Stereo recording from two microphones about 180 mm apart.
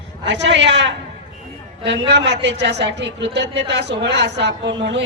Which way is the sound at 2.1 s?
70° right (ahead or behind).